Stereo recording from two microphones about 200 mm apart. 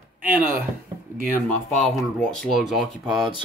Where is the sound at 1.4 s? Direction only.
Centre (ahead or behind).